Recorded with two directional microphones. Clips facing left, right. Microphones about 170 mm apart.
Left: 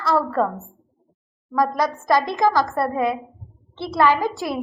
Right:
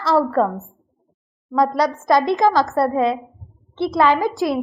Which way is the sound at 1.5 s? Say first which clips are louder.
Right 3 dB; 20° right (ahead or behind).